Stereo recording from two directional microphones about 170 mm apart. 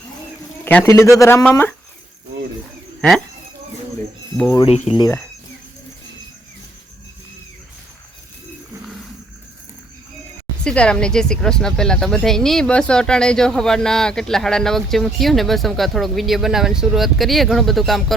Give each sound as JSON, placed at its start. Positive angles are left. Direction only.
{"t": 0.6, "sound": "a man's voice", "side_deg": 10}
{"t": 4.5, "sound": "speech", "side_deg": 35}
{"t": 4.9, "sound": "speech", "side_deg": 20}
{"t": 10.6, "sound": "speech", "side_deg": 5}